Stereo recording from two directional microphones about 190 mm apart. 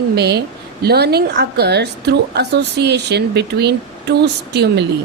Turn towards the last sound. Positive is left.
turn(degrees=-60)  # may be behind; listen again after turning